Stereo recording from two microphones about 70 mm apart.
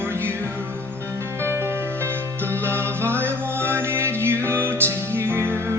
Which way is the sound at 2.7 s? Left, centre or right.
Right.